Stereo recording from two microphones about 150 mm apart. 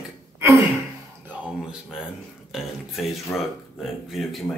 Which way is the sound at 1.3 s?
10° right (ahead or behind).